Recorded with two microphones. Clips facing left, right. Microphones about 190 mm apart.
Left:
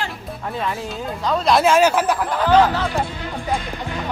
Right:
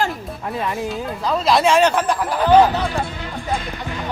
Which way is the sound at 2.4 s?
15° right (ahead or behind).